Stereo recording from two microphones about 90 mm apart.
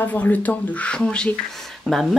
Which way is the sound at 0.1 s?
20° left (ahead or behind).